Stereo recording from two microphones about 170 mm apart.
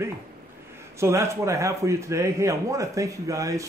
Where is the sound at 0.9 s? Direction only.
15° right (ahead or behind).